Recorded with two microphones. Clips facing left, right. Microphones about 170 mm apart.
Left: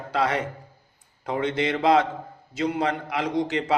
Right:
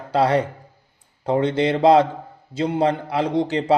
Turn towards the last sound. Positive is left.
turn(degrees=-30)  # may be behind; listen again after turning